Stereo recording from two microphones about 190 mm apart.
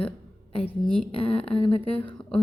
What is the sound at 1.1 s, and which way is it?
Speech, 30° left (ahead or behind).